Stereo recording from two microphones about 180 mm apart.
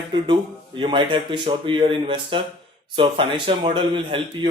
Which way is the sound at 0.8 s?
30° right (ahead or behind).